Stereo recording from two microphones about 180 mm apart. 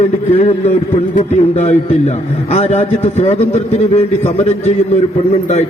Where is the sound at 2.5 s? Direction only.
40° left (ahead or behind).